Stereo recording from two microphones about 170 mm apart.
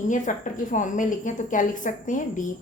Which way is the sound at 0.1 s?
50° left (ahead or behind).